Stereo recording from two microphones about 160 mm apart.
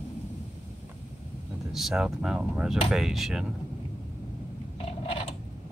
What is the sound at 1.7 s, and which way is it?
Speech, centre (ahead or behind).